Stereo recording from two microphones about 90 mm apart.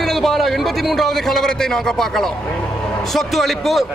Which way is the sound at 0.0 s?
Centre (ahead or behind).